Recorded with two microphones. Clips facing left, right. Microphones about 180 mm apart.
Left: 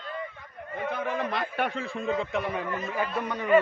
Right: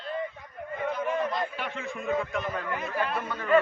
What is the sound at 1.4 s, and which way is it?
Speech, 55° left (ahead or behind).